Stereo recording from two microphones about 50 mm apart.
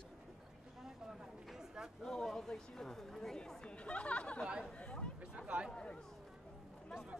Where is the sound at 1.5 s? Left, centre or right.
Centre.